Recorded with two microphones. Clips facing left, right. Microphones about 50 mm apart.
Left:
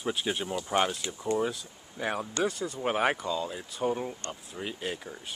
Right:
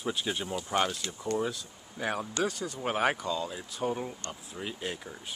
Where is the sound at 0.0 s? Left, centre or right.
Centre.